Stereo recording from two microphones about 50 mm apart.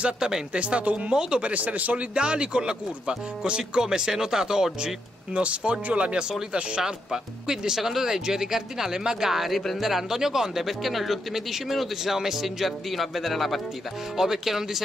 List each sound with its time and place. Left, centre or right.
0.0 s speech: centre
0.5 s speech: right
2.1 s speech: centre
4.8 s speech: right
6.5 s speech: centre